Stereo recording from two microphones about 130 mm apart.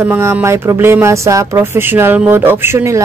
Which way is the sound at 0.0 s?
15° right (ahead or behind).